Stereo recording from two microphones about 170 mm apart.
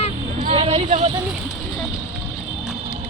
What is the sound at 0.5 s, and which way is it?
Speech, 40° right (ahead or behind).